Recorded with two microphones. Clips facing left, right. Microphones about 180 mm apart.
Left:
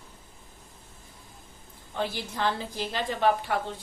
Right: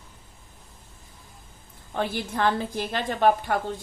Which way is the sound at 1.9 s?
55° right (ahead or behind).